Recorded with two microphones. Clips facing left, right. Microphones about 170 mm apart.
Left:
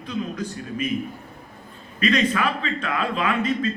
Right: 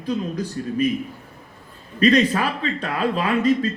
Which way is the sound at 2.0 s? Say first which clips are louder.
Right 4 dB; 35° right (ahead or behind).